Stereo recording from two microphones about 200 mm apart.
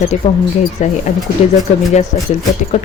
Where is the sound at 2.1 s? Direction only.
30° left (ahead or behind).